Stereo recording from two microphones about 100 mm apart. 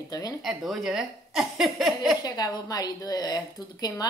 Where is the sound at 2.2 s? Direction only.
40° left (ahead or behind).